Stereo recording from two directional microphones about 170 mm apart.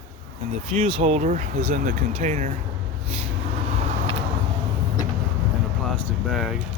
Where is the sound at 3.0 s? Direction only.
35° right (ahead or behind).